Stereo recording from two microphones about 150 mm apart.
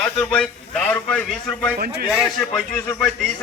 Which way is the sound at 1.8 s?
90° right.